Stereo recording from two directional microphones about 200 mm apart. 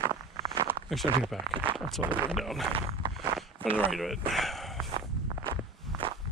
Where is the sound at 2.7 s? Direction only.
25° right (ahead or behind).